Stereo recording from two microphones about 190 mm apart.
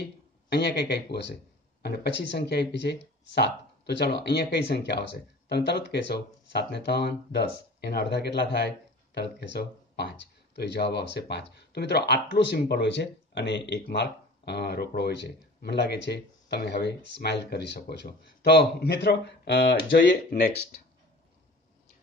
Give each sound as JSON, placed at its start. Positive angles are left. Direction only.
{"t": 0.5, "sound": "speech", "side_deg": 60}
{"t": 20.2, "sound": "speech", "side_deg": 45}